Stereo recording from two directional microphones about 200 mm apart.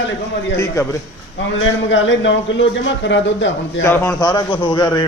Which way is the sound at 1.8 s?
65° left (ahead or behind).